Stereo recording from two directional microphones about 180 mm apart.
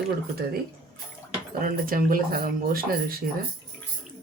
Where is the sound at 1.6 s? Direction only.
50° right (ahead or behind).